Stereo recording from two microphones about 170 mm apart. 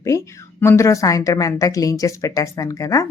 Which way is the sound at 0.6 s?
15° left (ahead or behind).